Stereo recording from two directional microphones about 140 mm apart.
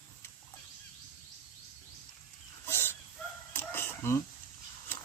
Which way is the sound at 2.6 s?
15° left (ahead or behind).